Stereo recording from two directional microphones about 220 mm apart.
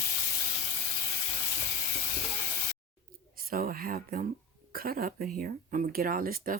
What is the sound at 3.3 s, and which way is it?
Speech, 40° right (ahead or behind).